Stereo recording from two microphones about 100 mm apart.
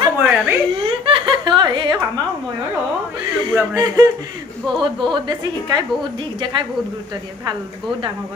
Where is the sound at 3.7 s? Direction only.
40° right (ahead or behind).